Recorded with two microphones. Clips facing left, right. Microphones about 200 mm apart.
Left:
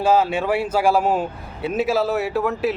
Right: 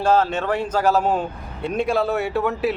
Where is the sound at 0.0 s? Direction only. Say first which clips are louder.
Left 1 dB; 10° left (ahead or behind).